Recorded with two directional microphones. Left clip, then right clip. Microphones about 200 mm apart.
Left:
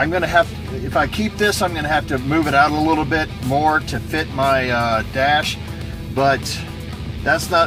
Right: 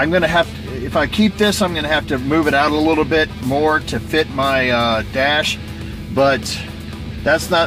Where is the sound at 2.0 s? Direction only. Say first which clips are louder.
Right 3 dB; 40° right (ahead or behind).